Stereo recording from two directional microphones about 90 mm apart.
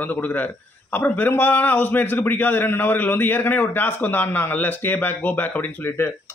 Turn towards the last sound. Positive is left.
turn(degrees=20)  # may be behind; listen again after turning